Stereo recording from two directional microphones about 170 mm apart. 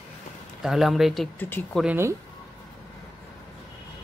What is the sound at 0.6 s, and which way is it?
Speech, centre (ahead or behind).